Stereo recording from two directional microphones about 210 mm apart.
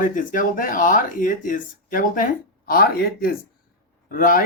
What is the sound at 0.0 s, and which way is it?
Speech, 40° left (ahead or behind).